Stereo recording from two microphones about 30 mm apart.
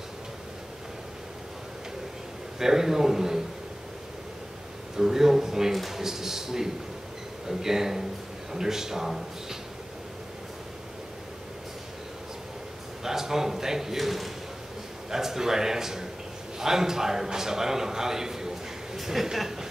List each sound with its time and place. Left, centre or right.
2.6 s a man's voice: centre
4.9 s a man's voice: centre
13.0 s a man's voice: centre
15.0 s a man's voice: centre